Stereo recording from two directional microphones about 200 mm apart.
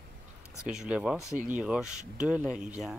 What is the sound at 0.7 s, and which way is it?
Speech, 5° right (ahead or behind).